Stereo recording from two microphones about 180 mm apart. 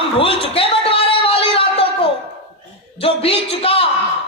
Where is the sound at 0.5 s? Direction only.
30° left (ahead or behind).